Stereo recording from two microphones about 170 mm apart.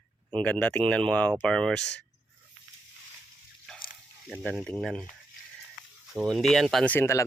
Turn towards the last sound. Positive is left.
turn(degrees=15)  # may be behind; listen again after turning